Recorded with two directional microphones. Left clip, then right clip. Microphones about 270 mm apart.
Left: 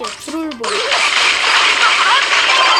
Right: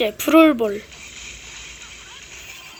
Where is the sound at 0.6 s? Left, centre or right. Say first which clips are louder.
Left 11 dB; left.